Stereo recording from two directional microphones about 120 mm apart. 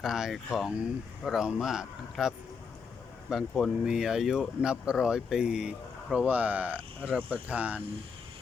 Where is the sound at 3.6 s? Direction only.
5° right (ahead or behind).